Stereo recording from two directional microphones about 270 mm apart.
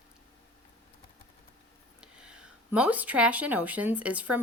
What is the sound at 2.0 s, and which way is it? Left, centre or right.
Speech, centre.